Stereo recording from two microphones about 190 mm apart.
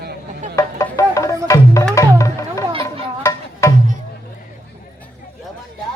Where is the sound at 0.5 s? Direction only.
15° left (ahead or behind).